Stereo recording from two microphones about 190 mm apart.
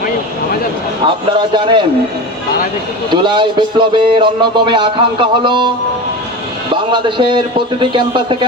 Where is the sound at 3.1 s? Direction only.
25° right (ahead or behind).